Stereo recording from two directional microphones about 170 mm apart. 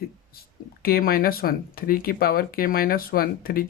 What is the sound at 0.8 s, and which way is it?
Speech, 60° left (ahead or behind).